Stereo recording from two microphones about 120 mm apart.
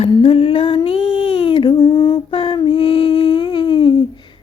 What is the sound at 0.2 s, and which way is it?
Humming, 50° left (ahead or behind).